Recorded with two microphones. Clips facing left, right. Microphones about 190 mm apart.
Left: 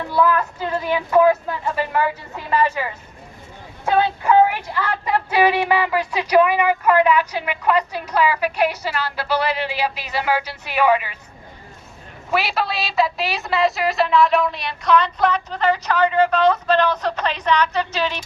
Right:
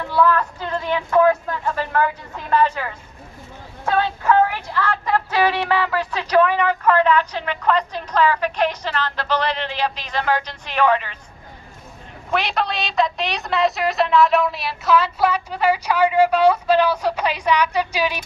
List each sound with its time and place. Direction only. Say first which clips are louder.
0.1 s speech: right 1 dB; 10° left (ahead or behind)
12.3 s a woman's voice: even; 5° left (ahead or behind)